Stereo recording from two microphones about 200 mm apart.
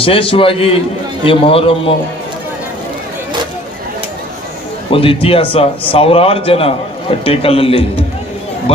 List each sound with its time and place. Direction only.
0.0 s a man's voice: 25° left (ahead or behind)
4.9 s a man's voice: 25° left (ahead or behind)